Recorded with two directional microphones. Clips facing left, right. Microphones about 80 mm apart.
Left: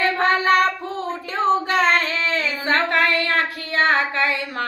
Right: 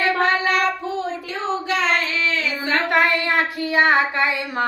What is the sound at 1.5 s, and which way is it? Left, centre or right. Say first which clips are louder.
Child singing: left 3 dB; left.